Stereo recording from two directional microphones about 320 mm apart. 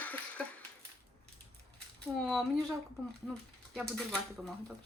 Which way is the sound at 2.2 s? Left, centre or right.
Centre.